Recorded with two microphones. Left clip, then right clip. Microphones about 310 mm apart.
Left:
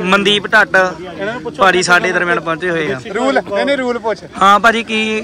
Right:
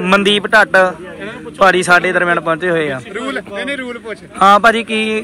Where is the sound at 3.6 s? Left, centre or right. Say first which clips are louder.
Left 7 dB; centre.